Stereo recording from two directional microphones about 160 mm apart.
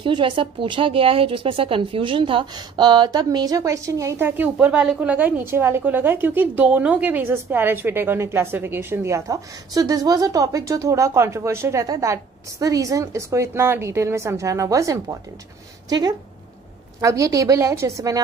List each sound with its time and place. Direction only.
0.0 s speech: 30° right (ahead or behind)